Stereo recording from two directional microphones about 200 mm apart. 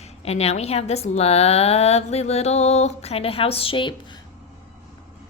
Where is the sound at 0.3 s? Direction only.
30° left (ahead or behind).